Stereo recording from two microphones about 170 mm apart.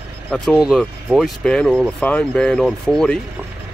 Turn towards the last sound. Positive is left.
turn(degrees=5)  # may be behind; listen again after turning